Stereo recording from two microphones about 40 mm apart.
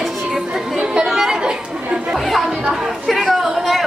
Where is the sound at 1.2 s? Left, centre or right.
Centre.